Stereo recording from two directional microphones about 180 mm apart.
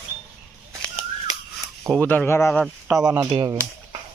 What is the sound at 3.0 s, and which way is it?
Speech, 20° right (ahead or behind).